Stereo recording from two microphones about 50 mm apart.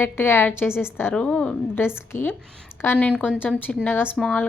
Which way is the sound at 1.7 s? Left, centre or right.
Left.